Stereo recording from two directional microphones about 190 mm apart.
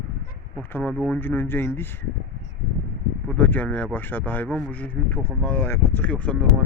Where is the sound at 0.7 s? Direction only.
10° left (ahead or behind).